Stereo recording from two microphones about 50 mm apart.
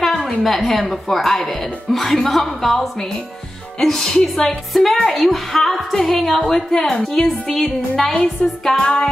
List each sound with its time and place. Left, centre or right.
0.2 s speech: centre